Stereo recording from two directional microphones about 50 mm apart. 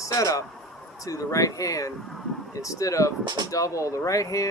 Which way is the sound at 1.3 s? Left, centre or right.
Left.